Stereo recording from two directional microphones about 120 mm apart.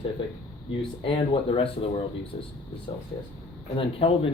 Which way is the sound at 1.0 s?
45° left (ahead or behind).